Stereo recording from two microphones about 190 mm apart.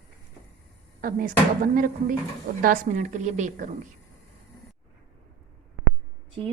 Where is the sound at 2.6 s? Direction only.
45° right (ahead or behind).